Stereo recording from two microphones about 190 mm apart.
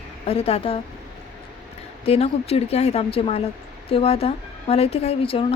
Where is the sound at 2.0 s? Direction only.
30° left (ahead or behind).